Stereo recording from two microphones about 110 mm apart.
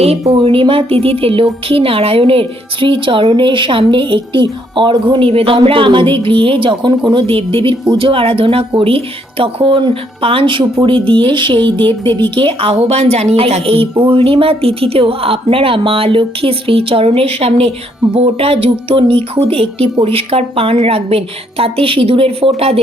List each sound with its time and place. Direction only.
0.0 s music: 65° right (ahead or behind); by 4.2 s 50° right (ahead or behind)
4.4 s a woman's voice: 45° right (ahead or behind)
7.9 s music: 55° right (ahead or behind)
10.8 s a woman's voice: 50° right (ahead or behind)
12.3 s music: 55° right (ahead or behind); by 13.6 s 70° right (ahead or behind)
14.1 s music: 50° right (ahead or behind)